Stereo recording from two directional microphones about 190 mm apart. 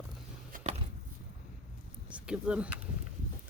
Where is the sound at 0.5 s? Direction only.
35° right (ahead or behind).